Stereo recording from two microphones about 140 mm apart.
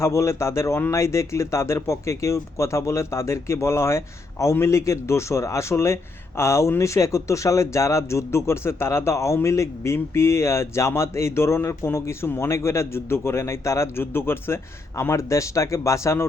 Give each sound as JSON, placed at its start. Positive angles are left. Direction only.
{"t": 0.0, "sound": "speech", "side_deg": 20}